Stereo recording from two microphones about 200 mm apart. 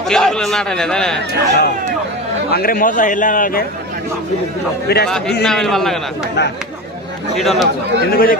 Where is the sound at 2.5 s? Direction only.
45° left (ahead or behind).